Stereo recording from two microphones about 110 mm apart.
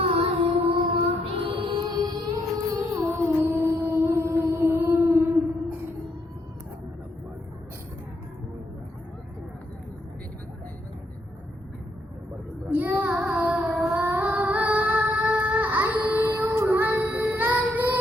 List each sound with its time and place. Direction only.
0.0 s music: 65° right (ahead or behind)
1.9 s music: 40° right (ahead or behind); by 5.7 s 20° right (ahead or behind)
12.7 s child singing: 15° right (ahead or behind)
13.1 s music: 15° right (ahead or behind)
16.5 s child singing: 25° right (ahead or behind)